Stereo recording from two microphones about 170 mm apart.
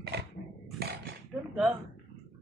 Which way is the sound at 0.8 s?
65° right (ahead or behind).